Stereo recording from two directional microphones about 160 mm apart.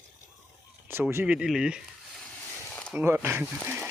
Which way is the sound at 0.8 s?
15° right (ahead or behind).